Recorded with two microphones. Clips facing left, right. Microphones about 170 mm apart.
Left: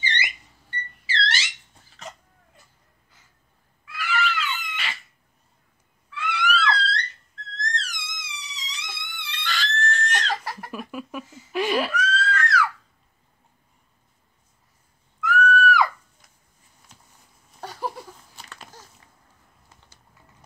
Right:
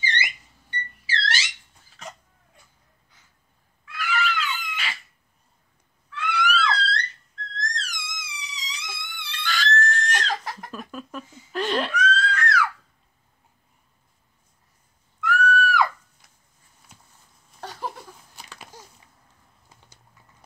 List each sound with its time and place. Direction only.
0.0 s alarm: centre (ahead or behind)
3.8 s cat: centre (ahead or behind)
6.0 s screaming: 5° left (ahead or behind)
7.7 s music: centre (ahead or behind)
15.1 s screaming: 5° left (ahead or behind)
17.6 s a sound: 5° left (ahead or behind)
18.5 s a sound: 10° right (ahead or behind)